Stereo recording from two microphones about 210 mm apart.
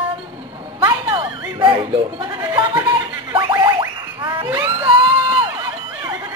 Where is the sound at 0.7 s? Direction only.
25° right (ahead or behind).